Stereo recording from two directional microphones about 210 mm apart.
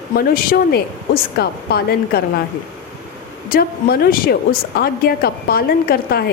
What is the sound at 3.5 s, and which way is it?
Speech, 45° left (ahead or behind).